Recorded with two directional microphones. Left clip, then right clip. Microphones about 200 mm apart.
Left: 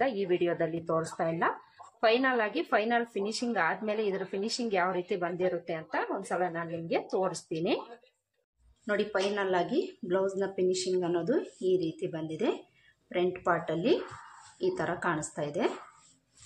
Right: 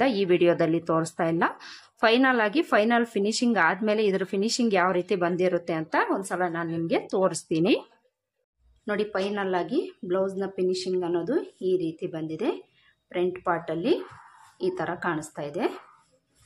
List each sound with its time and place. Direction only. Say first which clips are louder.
0.0 s speech: right 7 dB; 35° right (ahead or behind)
8.8 s speech: right 2 dB; 20° right (ahead or behind)